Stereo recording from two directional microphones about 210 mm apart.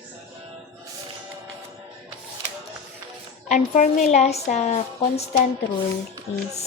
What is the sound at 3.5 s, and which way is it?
A woman's voice, 35° left (ahead or behind).